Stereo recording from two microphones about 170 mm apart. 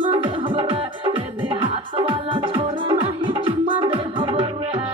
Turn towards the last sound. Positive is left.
turn(degrees=-30)  # may be behind; listen again after turning